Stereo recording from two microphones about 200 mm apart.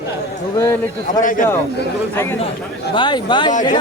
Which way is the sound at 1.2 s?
40° left (ahead or behind).